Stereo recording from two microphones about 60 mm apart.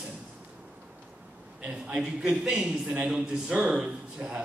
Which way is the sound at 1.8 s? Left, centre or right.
Centre.